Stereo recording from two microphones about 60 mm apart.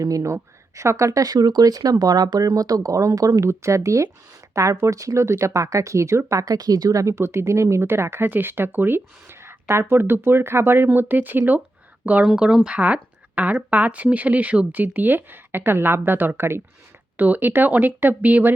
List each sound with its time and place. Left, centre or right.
0.0 s speech: right
0.8 s speech: right
3.5 s speech: right
6.4 s speech: right
12.3 s speech: centre